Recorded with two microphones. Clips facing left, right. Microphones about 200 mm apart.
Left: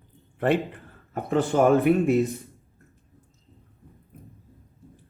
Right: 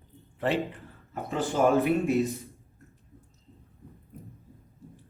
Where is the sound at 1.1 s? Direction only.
55° left (ahead or behind).